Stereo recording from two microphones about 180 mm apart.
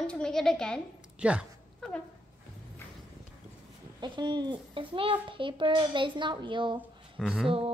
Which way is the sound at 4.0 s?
25° right (ahead or behind).